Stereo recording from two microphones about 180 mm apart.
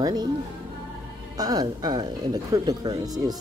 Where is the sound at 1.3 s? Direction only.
20° right (ahead or behind).